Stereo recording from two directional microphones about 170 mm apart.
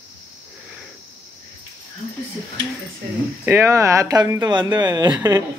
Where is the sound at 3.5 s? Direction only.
15° right (ahead or behind).